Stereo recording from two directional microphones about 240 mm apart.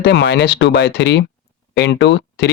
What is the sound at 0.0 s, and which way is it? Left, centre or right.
Speech, left.